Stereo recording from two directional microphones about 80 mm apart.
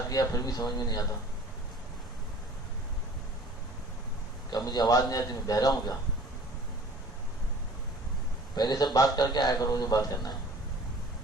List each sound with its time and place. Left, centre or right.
0.1 s a man's voice: left
4.5 s a man's voice: left
8.5 s a man's voice: left